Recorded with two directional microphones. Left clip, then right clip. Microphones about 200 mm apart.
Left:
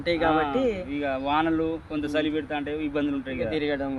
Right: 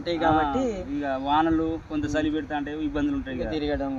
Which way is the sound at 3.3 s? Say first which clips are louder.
Left 4 dB; centre (ahead or behind).